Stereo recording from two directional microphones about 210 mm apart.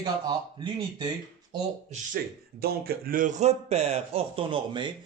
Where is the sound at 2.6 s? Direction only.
45° right (ahead or behind).